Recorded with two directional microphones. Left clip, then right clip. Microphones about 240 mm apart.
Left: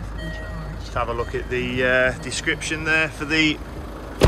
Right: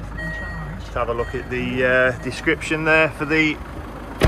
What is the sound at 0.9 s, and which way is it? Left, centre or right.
Speech, centre.